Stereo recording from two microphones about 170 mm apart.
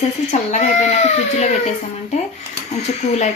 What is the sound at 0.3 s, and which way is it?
Speech, 45° left (ahead or behind).